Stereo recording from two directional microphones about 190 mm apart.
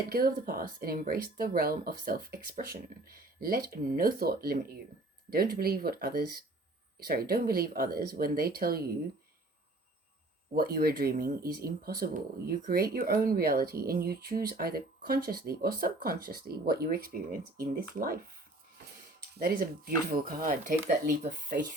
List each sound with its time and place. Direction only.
0.1 s speech: 50° right (ahead or behind)
10.5 s speech: 50° right (ahead or behind)
19.4 s speech: 50° right (ahead or behind)